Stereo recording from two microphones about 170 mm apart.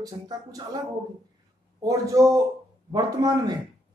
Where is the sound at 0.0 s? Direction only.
20° right (ahead or behind).